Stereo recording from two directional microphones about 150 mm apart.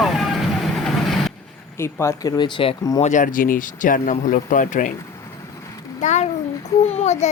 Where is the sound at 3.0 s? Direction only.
55° left (ahead or behind).